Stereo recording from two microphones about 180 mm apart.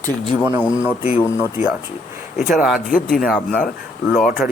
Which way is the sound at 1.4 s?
5° right (ahead or behind).